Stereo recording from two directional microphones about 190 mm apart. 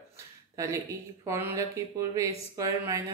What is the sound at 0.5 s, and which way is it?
Speech, 15° right (ahead or behind).